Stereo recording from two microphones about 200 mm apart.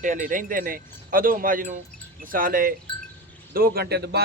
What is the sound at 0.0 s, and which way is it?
A man's voice, 40° right (ahead or behind).